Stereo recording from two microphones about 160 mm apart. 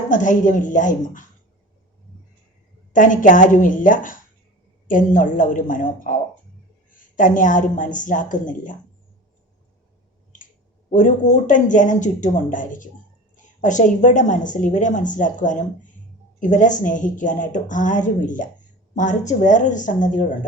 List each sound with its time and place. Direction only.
0.1 s speech: 55° left (ahead or behind)
2.9 s a woman's voice: 55° left (ahead or behind)
10.9 s speech: 50° left (ahead or behind)